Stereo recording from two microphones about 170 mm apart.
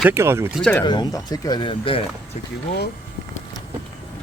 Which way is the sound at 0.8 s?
25° left (ahead or behind).